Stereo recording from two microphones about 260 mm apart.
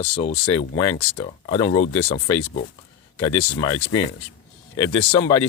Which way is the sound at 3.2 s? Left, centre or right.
Centre.